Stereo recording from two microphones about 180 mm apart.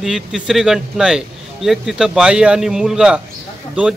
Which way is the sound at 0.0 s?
Centre (ahead or behind).